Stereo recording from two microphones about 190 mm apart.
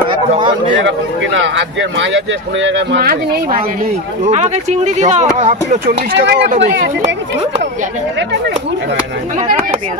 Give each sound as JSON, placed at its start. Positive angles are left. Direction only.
{"t": 0.7, "sound": "speech", "side_deg": -80}
{"t": 3.0, "sound": "speech", "side_deg": -50}
{"t": 4.2, "sound": "speech", "side_deg": -35}
{"t": 5.9, "sound": "speech", "side_deg": -60}